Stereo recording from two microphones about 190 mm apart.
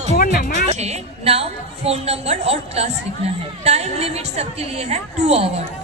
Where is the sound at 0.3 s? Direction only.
50° left (ahead or behind).